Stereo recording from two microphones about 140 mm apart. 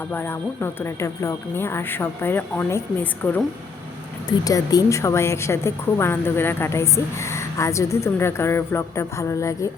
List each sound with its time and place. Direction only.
0.1 s speech: 15° left (ahead or behind)
4.3 s a woman's voice: 25° left (ahead or behind)